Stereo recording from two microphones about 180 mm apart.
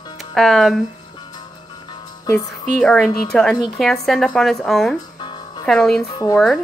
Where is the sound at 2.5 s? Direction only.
5° left (ahead or behind).